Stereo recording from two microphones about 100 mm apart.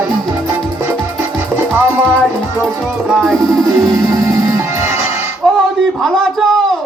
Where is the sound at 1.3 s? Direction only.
20° right (ahead or behind).